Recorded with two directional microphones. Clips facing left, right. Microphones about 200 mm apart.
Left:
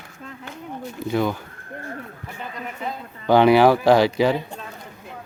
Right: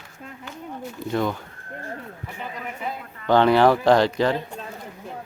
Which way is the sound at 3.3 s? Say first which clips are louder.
Left 2 dB; 10° left (ahead or behind).